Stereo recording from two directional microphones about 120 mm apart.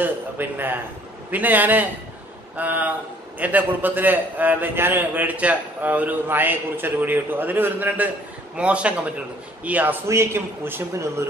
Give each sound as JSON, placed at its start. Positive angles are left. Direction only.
{"t": 0.0, "sound": "a man's voice", "side_deg": -15}